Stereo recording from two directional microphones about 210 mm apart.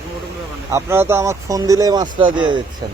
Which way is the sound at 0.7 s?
15° right (ahead or behind).